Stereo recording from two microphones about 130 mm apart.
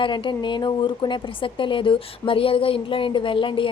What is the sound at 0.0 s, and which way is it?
A woman's voice, 40° left (ahead or behind).